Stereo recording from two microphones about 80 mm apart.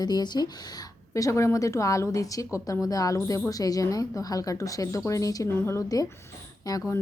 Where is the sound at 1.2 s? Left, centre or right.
Left.